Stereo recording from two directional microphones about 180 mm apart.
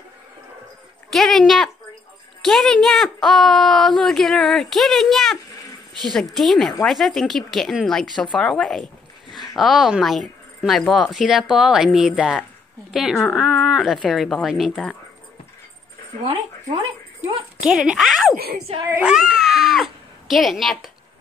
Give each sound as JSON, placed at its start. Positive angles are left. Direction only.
{"t": 1.1, "sound": "speech", "side_deg": 0}
{"t": 17.6, "sound": "speech", "side_deg": -5}
{"t": 18.3, "sound": "a woman's voice", "side_deg": -60}
{"t": 18.9, "sound": "speech", "side_deg": -5}